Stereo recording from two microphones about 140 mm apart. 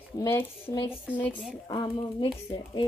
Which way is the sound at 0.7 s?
15° left (ahead or behind).